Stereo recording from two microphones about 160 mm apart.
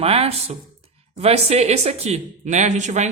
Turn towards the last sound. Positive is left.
turn(degrees=-45)  # may be behind; listen again after turning